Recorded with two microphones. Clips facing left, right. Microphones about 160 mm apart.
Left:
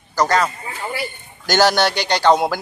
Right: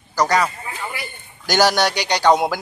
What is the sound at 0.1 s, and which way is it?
A man's voice, 10° right (ahead or behind).